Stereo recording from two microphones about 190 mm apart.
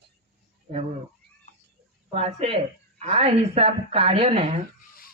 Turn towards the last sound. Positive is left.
turn(degrees=-35)  # may be behind; listen again after turning